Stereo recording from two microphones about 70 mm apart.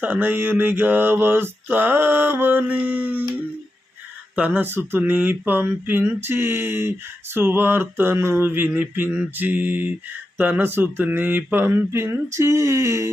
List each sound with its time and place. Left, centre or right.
0.0 s mantra: right
4.4 s speech: right
4.6 s speech: right
9.3 s mantra: right
10.3 s speech: right